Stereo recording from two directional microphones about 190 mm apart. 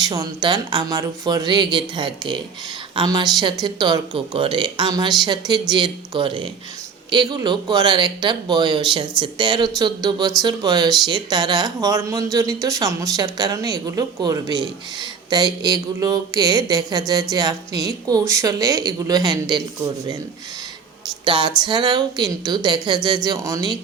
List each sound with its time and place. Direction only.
0.0 s speech: 20° right (ahead or behind)
21.2 s speech: 25° right (ahead or behind)